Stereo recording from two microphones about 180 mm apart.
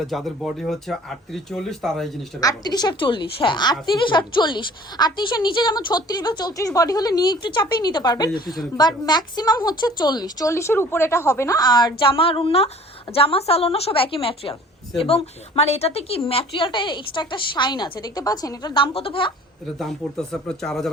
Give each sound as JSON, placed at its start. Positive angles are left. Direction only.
{"t": 0.1, "sound": "speech", "side_deg": 0}
{"t": 2.4, "sound": "a woman's voice", "side_deg": 20}
{"t": 19.6, "sound": "speech", "side_deg": 0}